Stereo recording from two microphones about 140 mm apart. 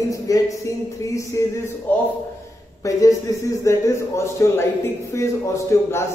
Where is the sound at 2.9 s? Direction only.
25° left (ahead or behind).